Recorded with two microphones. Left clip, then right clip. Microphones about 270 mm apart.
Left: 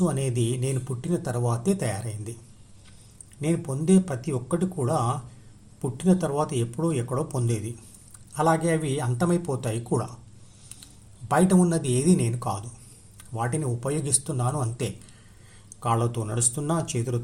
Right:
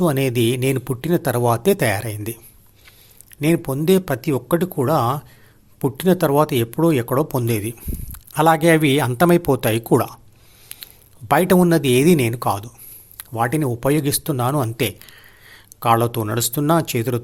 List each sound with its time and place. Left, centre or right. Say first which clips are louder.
0.0 s speech: right 9 dB; right
3.4 s speech: right 9 dB; right
10.7 s a sound: right 10 dB; right
11.3 s speech: right 8 dB; right